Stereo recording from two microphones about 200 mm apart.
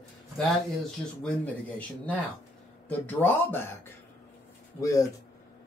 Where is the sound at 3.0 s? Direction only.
10° left (ahead or behind).